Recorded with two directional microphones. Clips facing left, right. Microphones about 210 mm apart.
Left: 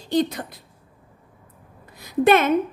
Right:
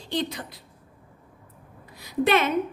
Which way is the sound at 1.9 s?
50° left (ahead or behind).